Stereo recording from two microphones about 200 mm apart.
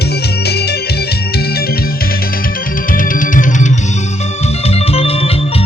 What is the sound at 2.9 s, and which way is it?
Music, 40° left (ahead or behind).